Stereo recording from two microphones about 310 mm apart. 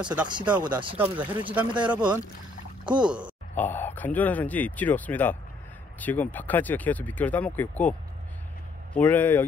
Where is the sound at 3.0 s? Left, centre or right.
Centre.